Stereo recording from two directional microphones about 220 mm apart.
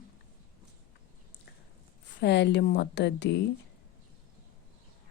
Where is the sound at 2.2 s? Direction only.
50° left (ahead or behind).